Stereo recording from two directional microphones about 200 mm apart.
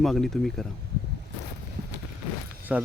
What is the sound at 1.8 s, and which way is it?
Vehicle, 50° right (ahead or behind).